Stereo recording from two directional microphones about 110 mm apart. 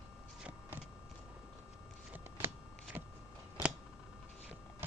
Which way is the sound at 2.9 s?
15° right (ahead or behind).